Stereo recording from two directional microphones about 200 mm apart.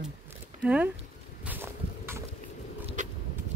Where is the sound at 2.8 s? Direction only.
40° right (ahead or behind).